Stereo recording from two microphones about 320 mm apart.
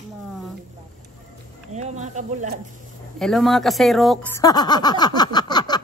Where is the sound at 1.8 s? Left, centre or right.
Right.